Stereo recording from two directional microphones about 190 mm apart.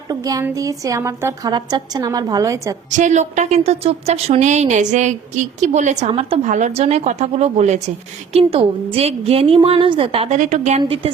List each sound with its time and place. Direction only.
0.1 s a woman's voice: 20° right (ahead or behind)
2.9 s a woman's voice: 40° right (ahead or behind)